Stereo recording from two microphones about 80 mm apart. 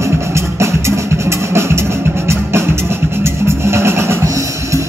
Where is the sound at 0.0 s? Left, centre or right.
Right.